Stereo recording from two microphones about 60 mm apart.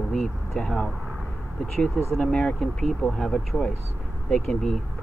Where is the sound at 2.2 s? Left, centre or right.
Centre.